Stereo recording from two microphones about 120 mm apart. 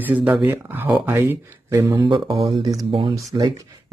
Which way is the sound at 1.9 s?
40° right (ahead or behind).